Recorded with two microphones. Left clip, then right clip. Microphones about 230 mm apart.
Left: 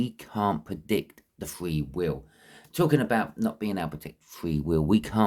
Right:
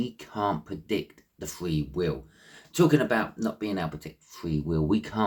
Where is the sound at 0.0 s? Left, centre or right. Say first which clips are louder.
Left 1 dB; left.